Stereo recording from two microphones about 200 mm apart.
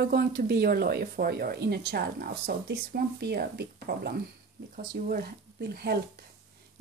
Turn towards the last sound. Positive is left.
turn(degrees=-50)  # may be behind; listen again after turning